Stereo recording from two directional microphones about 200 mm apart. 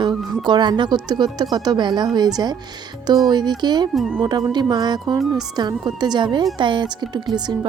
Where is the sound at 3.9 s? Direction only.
Centre (ahead or behind).